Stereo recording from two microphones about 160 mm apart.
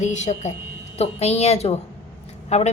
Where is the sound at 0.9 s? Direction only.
40° left (ahead or behind).